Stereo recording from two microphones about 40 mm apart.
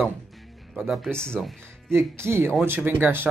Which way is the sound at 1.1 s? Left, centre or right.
Left.